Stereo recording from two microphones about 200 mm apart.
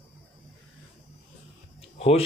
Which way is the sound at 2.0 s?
30° left (ahead or behind).